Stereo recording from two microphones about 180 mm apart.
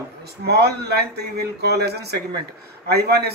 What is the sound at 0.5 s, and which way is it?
Speech, 65° right (ahead or behind).